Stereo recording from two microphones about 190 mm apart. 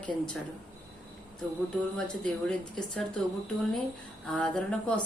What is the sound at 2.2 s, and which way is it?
Speech, 5° left (ahead or behind).